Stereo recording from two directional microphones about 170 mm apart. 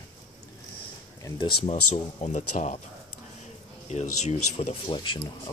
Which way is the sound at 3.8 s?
40° left (ahead or behind).